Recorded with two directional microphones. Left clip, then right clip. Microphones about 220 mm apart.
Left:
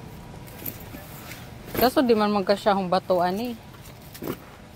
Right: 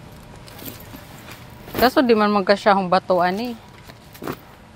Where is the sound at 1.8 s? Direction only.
10° right (ahead or behind).